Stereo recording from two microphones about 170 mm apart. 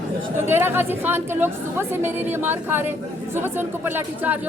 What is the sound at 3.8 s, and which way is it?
Speech, 10° right (ahead or behind).